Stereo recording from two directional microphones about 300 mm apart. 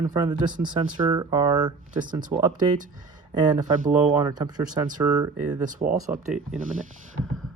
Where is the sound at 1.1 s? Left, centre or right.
Centre.